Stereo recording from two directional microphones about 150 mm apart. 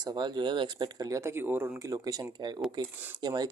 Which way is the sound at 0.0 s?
30° right (ahead or behind).